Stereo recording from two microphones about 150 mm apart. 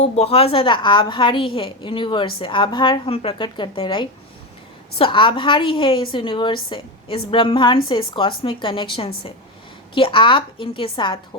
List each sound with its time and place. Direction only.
0.0 s a woman's voice: 45° left (ahead or behind)